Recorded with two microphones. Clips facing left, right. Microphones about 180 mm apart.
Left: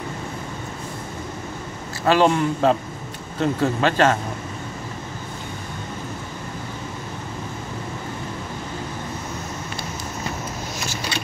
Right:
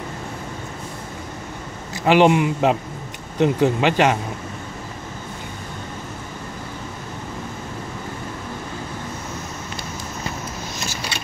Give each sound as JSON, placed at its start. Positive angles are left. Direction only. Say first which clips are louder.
{"t": 2.0, "sound": "speech", "louder": "right 2 dB", "side_deg": -15}